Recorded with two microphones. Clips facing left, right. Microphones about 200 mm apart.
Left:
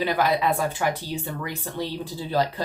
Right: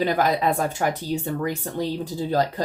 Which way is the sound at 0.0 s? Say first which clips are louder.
Right 2 dB; 45° right (ahead or behind).